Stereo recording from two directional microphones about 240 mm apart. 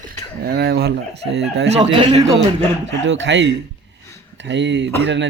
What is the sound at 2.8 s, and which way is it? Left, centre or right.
Speech, right.